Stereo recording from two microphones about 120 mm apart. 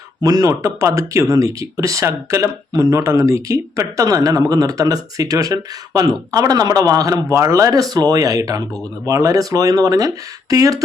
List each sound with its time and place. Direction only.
0.2 s speech: 30° right (ahead or behind)